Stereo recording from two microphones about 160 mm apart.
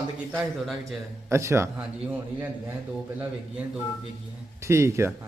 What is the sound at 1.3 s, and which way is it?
A man's voice, 15° right (ahead or behind).